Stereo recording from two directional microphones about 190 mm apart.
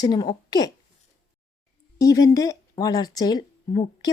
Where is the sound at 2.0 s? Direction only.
20° left (ahead or behind).